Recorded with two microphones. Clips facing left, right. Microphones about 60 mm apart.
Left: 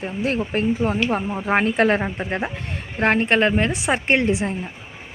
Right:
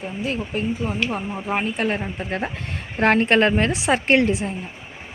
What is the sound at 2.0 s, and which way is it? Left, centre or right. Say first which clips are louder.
Speech: left 2 dB; left.